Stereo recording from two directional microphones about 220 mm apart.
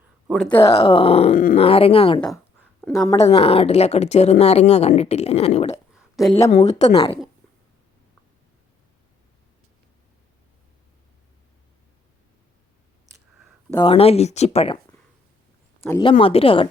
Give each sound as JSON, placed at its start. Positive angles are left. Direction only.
{"t": 0.3, "sound": "speech", "side_deg": 0}
{"t": 0.6, "sound": "speech", "side_deg": 25}
{"t": 5.9, "sound": "a sound", "side_deg": 0}
{"t": 6.5, "sound": "speech", "side_deg": 30}
{"t": 13.7, "sound": "speech", "side_deg": 25}
{"t": 16.0, "sound": "speech", "side_deg": 25}